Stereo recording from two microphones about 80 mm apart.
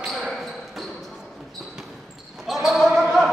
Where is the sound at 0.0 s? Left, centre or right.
Centre.